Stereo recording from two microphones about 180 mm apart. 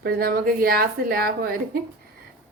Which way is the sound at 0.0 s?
55° right (ahead or behind).